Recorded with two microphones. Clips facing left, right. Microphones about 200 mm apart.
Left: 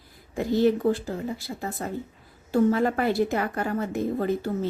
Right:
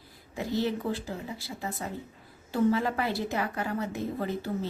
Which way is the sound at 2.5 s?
50° left (ahead or behind).